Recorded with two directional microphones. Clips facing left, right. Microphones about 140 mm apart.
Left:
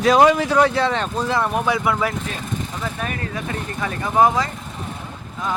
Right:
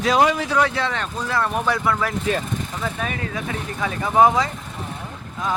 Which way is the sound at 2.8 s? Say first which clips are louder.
Even; centre (ahead or behind).